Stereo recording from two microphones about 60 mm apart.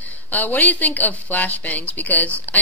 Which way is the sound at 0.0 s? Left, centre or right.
Left.